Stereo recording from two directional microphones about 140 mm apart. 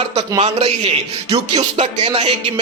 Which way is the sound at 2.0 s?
45° right (ahead or behind).